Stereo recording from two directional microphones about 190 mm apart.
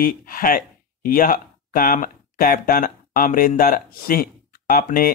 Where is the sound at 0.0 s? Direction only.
50° left (ahead or behind).